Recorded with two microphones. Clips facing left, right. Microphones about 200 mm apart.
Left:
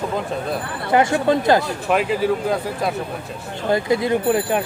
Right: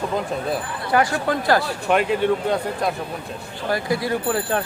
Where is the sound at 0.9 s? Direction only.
25° left (ahead or behind).